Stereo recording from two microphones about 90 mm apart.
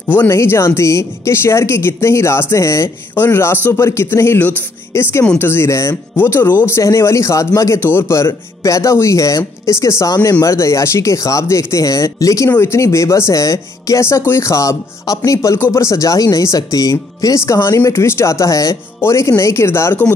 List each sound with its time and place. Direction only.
0.3 s speech: 30° left (ahead or behind)